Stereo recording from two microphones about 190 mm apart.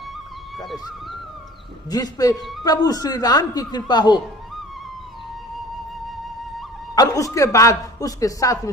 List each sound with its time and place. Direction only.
1.9 s a man's voice: 20° left (ahead or behind)
6.9 s a man's voice: 20° left (ahead or behind)